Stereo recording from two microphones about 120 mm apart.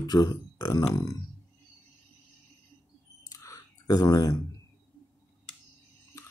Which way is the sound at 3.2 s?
30° left (ahead or behind).